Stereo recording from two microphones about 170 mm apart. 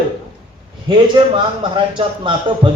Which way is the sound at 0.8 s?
30° right (ahead or behind).